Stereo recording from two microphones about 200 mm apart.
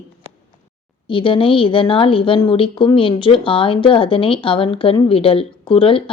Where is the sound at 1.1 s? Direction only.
25° left (ahead or behind).